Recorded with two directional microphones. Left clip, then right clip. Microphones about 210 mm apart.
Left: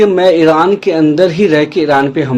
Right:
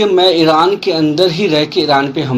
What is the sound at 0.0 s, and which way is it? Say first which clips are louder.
Speech: left 2 dB; 35° left (ahead or behind).